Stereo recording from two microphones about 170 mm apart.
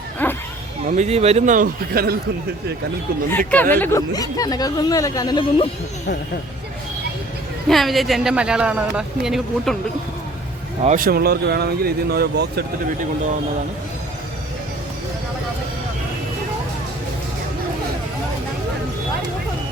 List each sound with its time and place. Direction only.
0.2 s a sound: 10° left (ahead or behind)
0.9 s a man's voice: 40° right (ahead or behind); by 2.1 s 65° right (ahead or behind)
3.2 s speech: 10° left (ahead or behind); by 5.6 s 30° left (ahead or behind)
7.7 s speech: centre (ahead or behind)
10.8 s speech: 55° right (ahead or behind)